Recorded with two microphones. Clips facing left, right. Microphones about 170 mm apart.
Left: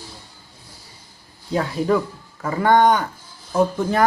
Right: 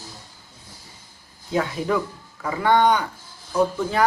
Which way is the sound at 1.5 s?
40° left (ahead or behind).